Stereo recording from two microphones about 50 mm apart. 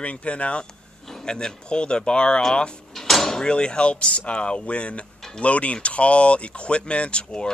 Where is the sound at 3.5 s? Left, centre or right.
Centre.